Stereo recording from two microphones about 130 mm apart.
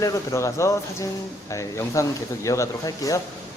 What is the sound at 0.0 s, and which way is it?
Speech, 25° left (ahead or behind).